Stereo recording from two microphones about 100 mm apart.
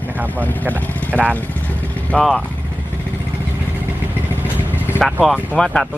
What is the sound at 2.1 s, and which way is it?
Speech, 5° left (ahead or behind).